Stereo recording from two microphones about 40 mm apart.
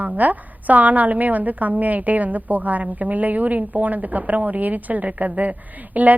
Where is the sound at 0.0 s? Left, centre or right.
Right.